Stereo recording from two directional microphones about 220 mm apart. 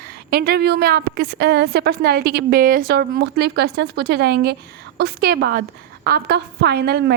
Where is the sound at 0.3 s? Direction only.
45° right (ahead or behind).